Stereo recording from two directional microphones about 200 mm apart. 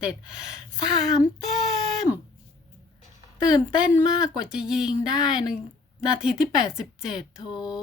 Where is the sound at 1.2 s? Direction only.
Centre (ahead or behind).